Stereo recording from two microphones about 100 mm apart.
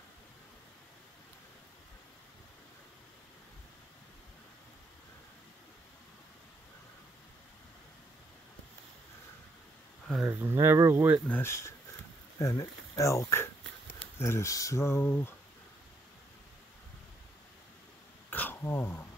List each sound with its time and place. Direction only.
10.2 s speech: 25° right (ahead or behind)
11.2 s speech: 20° left (ahead or behind)
18.3 s dog: 20° left (ahead or behind)